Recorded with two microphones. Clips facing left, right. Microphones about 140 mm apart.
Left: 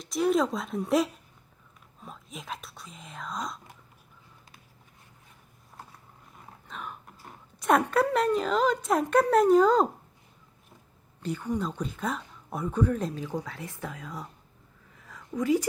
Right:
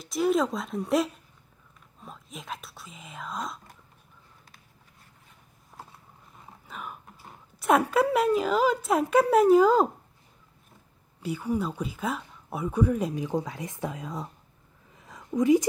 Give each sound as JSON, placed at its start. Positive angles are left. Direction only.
{"t": 0.0, "sound": "a woman's voice", "side_deg": 0}
{"t": 2.0, "sound": "whispering", "side_deg": 0}
{"t": 6.7, "sound": "speech", "side_deg": -5}
{"t": 11.2, "sound": "speech", "side_deg": -10}
{"t": 14.9, "sound": "a sound", "side_deg": -20}